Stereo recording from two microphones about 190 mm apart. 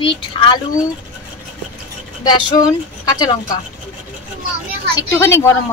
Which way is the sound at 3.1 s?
20° left (ahead or behind).